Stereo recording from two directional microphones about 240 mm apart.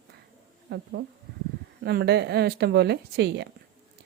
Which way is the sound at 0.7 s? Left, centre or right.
Right.